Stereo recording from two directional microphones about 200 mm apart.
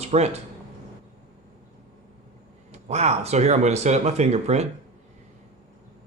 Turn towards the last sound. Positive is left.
turn(degrees=-35)  # may be behind; listen again after turning